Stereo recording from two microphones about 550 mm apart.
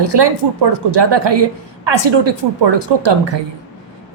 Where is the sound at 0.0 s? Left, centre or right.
Right.